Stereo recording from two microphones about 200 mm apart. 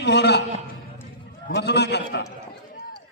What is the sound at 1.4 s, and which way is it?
Speech, 55° left (ahead or behind).